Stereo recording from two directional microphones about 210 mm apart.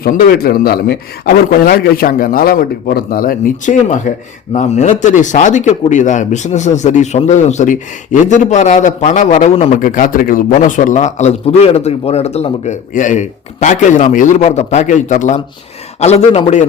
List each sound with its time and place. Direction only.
0.0 s a man's voice: 45° left (ahead or behind)